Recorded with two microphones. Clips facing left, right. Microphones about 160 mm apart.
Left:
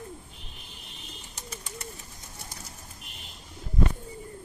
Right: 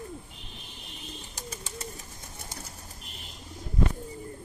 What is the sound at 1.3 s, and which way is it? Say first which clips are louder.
Bird: even; 25° right (ahead or behind).